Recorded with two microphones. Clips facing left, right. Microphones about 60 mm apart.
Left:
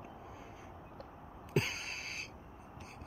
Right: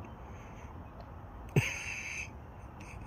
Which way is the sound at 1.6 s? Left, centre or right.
Right.